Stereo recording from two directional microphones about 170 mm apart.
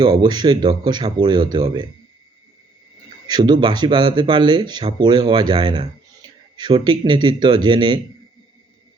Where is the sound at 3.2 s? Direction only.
25° right (ahead or behind).